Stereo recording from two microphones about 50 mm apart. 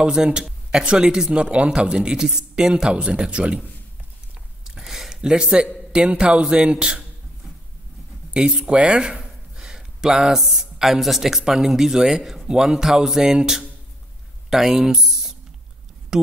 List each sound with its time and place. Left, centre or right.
0.0 s speech: centre
4.6 s a sound: centre
5.9 s speech: centre
8.3 s speech: centre
9.6 s a sound: centre
10.4 s a man's voice: centre
12.4 s speech: centre